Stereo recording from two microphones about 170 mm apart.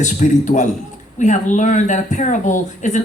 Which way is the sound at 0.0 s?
45° left (ahead or behind).